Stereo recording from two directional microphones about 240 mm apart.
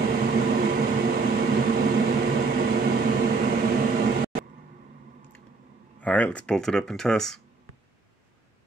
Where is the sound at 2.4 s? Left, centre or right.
Right.